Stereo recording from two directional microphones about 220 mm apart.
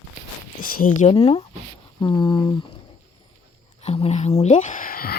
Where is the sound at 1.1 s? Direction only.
25° left (ahead or behind).